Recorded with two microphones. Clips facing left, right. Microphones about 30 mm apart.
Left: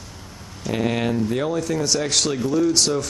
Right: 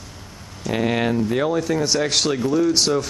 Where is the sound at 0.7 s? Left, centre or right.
Centre.